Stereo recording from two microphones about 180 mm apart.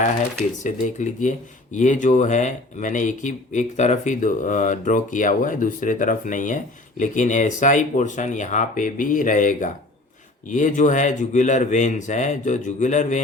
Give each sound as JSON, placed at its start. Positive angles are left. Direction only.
{"t": 0.6, "sound": "speech", "side_deg": 40}